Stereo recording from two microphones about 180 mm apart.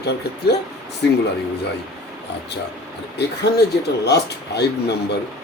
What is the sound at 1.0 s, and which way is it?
Speech, 70° left (ahead or behind).